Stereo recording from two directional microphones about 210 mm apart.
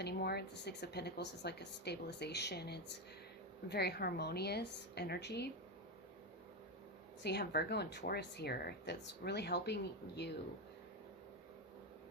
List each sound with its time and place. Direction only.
0.0 s speech: 50° left (ahead or behind)
7.2 s speech: 50° left (ahead or behind)